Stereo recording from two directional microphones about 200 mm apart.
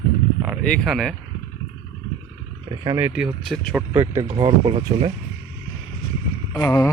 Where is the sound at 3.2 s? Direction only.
Centre (ahead or behind).